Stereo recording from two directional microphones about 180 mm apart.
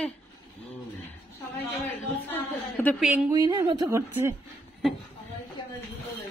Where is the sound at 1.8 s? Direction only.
10° left (ahead or behind).